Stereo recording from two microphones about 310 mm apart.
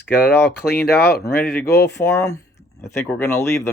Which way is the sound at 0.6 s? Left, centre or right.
Left.